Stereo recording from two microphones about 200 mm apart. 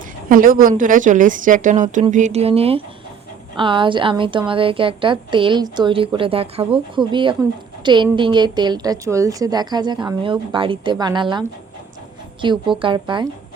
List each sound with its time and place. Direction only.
0.3 s a woman's voice: 45° right (ahead or behind); by 13.2 s 25° right (ahead or behind)